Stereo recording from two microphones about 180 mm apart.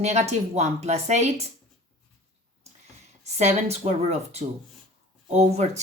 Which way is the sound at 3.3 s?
40° right (ahead or behind).